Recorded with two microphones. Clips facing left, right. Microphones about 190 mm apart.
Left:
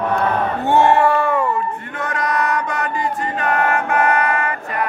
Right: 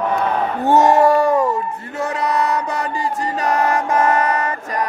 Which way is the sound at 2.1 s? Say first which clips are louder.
Even; 30° right (ahead or behind).